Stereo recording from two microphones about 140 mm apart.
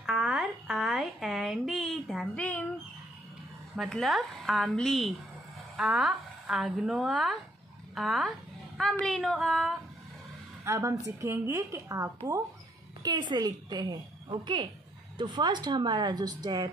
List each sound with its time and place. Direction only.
0.0 s a sound: 5° right (ahead or behind)
3.7 s speech: centre (ahead or behind)
10.6 s a woman's voice: 20° right (ahead or behind)